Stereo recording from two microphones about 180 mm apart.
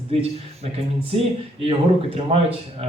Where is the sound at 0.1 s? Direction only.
35° right (ahead or behind).